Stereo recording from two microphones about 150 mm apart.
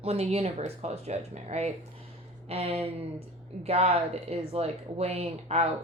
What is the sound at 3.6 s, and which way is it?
Speech, 40° right (ahead or behind).